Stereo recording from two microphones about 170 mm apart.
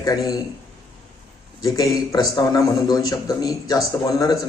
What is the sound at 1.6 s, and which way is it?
A man's voice, 20° left (ahead or behind).